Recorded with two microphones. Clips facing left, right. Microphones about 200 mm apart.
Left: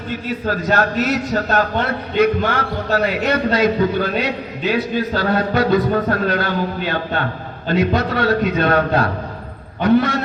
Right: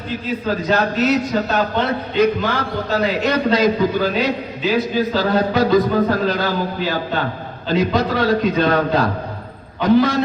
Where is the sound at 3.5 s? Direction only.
60° left (ahead or behind).